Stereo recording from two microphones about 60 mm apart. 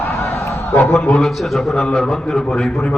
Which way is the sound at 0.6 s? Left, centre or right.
Left.